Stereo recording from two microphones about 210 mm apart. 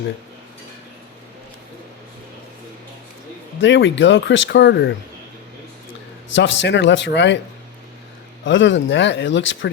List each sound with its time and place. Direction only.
3.6 s speech: 60° left (ahead or behind)
6.3 s speech: 60° left (ahead or behind)
8.4 s speech: 60° left (ahead or behind)